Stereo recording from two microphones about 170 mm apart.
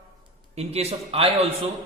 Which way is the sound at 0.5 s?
35° right (ahead or behind).